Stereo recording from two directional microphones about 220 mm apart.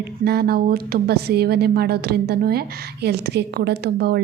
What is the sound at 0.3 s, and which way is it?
A woman's voice, 45° right (ahead or behind).